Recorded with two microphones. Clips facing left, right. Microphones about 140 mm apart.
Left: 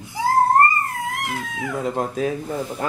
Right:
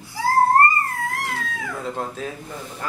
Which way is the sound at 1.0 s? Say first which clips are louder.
Even; 20° left (ahead or behind).